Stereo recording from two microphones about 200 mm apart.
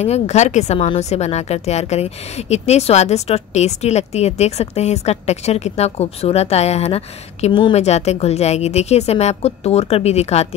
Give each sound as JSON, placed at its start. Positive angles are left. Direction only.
{"t": 0.0, "sound": "a woman's voice", "side_deg": 35}